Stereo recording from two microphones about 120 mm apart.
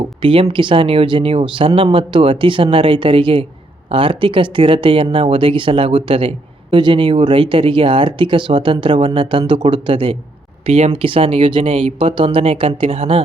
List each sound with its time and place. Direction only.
0.2 s speech: 45° right (ahead or behind)
10.7 s speech: 55° right (ahead or behind)